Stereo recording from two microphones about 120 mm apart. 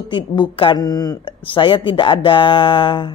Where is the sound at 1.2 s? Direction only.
45° left (ahead or behind).